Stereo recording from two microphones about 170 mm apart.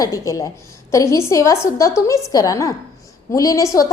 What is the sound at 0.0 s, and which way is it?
A woman's voice, 20° left (ahead or behind).